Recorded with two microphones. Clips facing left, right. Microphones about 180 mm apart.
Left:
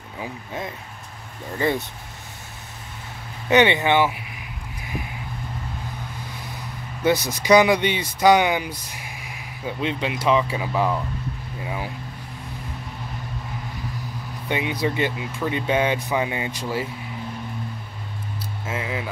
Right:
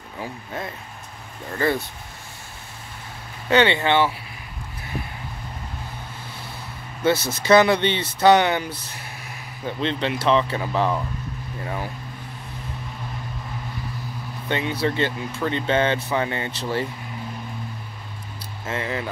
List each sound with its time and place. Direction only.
0.2 s speech: 10° left (ahead or behind)
3.4 s speech: 15° left (ahead or behind)
7.0 s speech: 15° left (ahead or behind)
14.5 s speech: 15° left (ahead or behind)
18.7 s speech: 5° left (ahead or behind)